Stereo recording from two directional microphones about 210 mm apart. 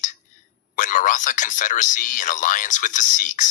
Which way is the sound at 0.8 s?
40° left (ahead or behind).